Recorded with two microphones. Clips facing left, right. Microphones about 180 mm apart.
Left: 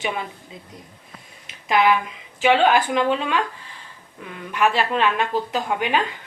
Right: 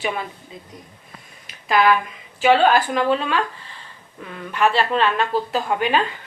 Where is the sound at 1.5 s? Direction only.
20° left (ahead or behind).